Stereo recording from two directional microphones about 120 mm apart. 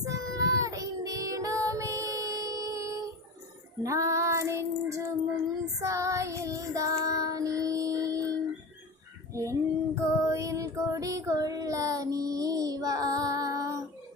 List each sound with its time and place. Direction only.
0.0 s child singing: 30° right (ahead or behind)
9.3 s child singing: 25° right (ahead or behind)